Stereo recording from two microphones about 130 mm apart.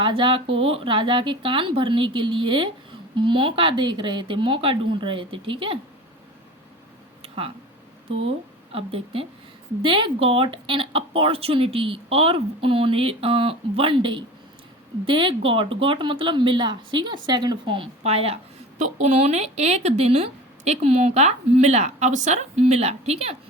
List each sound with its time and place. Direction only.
0.0 s speech: 40° right (ahead or behind)
7.2 s a sound: 45° right (ahead or behind)
8.7 s speech: 45° right (ahead or behind)
18.8 s speech: 60° right (ahead or behind)